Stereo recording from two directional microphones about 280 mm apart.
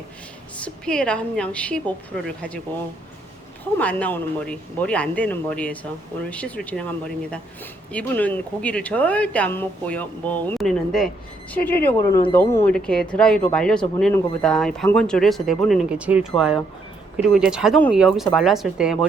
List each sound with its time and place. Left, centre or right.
0.5 s speech: centre
3.8 s speech: centre
7.9 s speech: centre
11.9 s speech: centre